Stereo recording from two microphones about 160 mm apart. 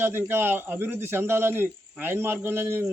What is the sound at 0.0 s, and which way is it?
A man's voice, 15° right (ahead or behind).